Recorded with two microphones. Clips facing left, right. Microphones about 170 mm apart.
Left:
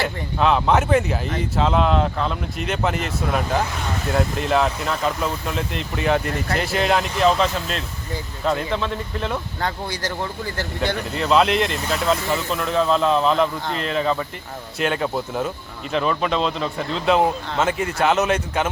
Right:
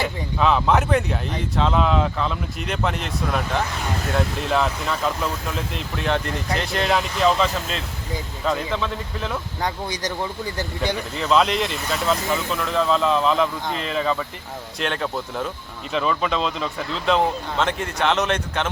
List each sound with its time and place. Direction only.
0.0 s speech: centre (ahead or behind)
9.6 s speech: 15° right (ahead or behind)
11.1 s speech: centre (ahead or behind)